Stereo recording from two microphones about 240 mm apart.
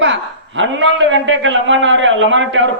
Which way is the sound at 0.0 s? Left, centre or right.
Right.